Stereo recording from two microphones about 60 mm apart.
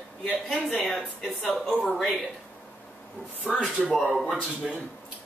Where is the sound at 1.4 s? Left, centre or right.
Centre.